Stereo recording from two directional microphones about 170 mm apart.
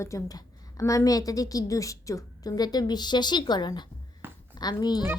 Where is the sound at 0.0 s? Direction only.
15° left (ahead or behind).